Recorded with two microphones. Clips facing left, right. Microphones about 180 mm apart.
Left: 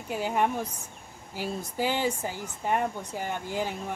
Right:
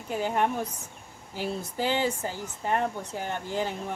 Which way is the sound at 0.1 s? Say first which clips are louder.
Even; 10° left (ahead or behind).